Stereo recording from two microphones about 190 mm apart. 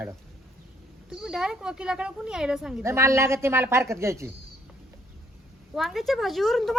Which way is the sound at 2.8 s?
15° right (ahead or behind).